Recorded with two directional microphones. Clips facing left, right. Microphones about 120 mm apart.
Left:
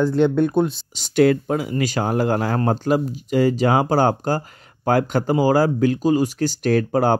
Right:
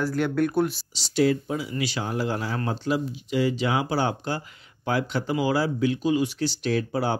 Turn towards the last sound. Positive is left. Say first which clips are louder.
# left 7 dB
turn(degrees=50)  # may be behind; listen again after turning